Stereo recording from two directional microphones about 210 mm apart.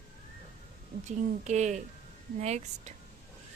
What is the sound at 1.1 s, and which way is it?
Speech, 35° right (ahead or behind).